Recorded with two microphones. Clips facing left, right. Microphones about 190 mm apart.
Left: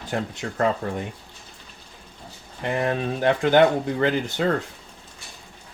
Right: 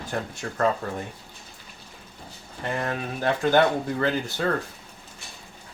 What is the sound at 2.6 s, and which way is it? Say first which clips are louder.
Speech: left 5 dB; 15° left (ahead or behind).